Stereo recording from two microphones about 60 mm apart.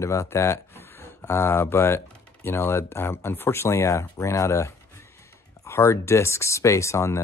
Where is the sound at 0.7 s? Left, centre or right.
Left.